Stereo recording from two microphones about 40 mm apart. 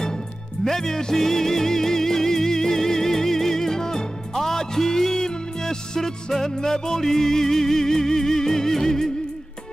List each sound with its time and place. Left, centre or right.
0.7 s music: centre